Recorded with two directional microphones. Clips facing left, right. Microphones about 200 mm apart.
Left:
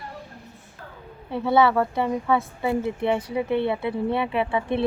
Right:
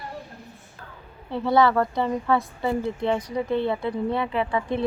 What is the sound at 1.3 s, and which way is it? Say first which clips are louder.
Speech: even; 5° left (ahead or behind).